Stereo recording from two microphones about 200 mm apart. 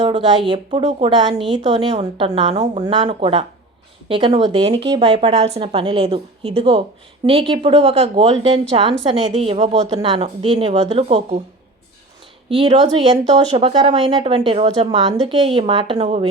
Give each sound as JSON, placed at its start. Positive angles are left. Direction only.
{"t": 0.0, "sound": "speech", "side_deg": -25}
{"t": 12.5, "sound": "speech", "side_deg": -25}